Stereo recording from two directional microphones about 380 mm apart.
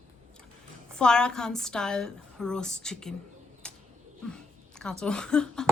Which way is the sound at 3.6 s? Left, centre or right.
Centre.